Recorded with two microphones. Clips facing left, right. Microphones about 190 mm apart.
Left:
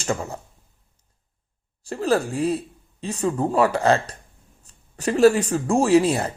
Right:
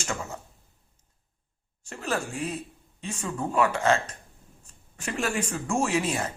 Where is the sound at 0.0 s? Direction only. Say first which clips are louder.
Left 7 dB; 35° left (ahead or behind).